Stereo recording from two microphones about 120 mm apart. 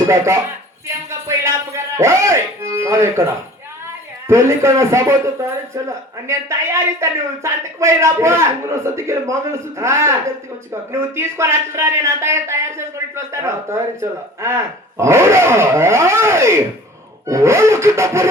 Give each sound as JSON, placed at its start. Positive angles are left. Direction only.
{"t": 1.3, "sound": "music", "side_deg": -25}
{"t": 4.3, "sound": "speech", "side_deg": -25}